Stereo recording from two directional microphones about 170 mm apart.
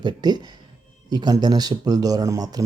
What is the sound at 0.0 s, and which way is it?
Speech, 25° right (ahead or behind).